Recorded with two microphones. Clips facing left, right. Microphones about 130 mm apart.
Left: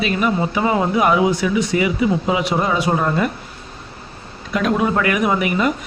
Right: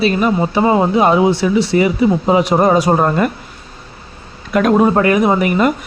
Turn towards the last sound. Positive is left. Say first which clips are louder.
# right 5 dB
turn(degrees=-50)  # may be behind; listen again after turning